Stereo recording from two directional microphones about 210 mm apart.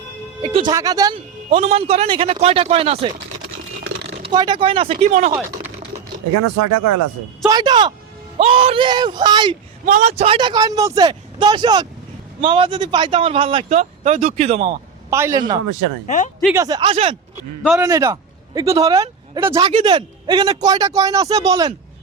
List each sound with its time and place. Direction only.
0.4 s a man's voice: 20° right (ahead or behind)
1.5 s speech: 30° right (ahead or behind)
4.2 s speech: 20° right (ahead or behind)
7.4 s speech: 20° right (ahead or behind)
9.8 s speech: 35° right (ahead or behind)
15.1 s a man's voice: 15° right (ahead or behind)
16.0 s speech: 35° left (ahead or behind)
16.6 s speech: 20° right (ahead or behind)
17.7 s a man's voice: 15° right (ahead or behind)